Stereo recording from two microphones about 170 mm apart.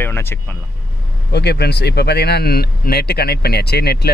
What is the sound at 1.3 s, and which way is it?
Speech, 75° left (ahead or behind).